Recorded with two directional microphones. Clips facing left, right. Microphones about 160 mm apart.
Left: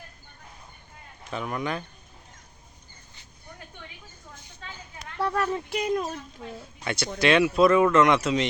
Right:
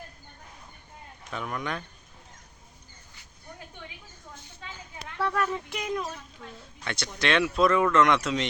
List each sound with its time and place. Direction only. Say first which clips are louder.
1.3 s speech: left 3 dB; 5° left (ahead or behind)
5.2 s speech: left 2 dB; 30° left (ahead or behind)
6.4 s a woman's voice: left 3 dB; 10° left (ahead or behind)